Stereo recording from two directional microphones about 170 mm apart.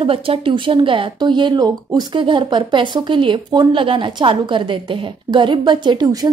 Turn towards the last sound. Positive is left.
turn(degrees=-25)  # may be behind; listen again after turning